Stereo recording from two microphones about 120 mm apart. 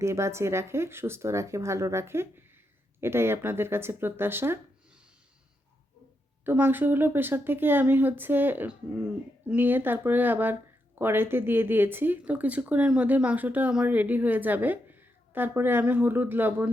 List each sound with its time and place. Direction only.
0.0 s speech: 25° right (ahead or behind)
6.4 s speech: 15° right (ahead or behind)